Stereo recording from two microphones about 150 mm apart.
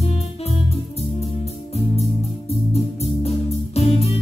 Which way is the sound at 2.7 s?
45° left (ahead or behind).